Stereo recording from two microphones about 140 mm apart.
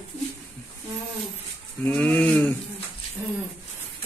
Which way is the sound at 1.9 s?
10° left (ahead or behind).